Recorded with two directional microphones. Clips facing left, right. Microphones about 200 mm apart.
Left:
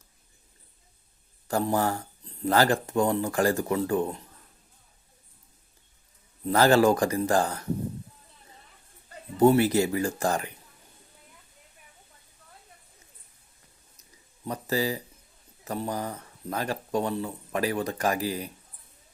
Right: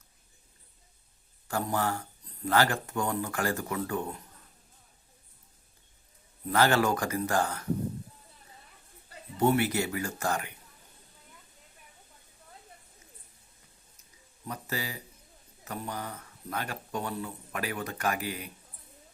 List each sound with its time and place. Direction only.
1.5 s speech: 35° left (ahead or behind)
6.5 s speech: 35° left (ahead or behind)
9.4 s speech: 35° left (ahead or behind)
14.4 s speech: 35° left (ahead or behind)